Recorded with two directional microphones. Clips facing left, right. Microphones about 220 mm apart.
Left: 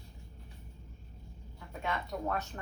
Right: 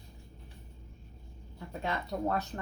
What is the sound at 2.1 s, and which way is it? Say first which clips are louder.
Speech: right 5 dB; 30° right (ahead or behind).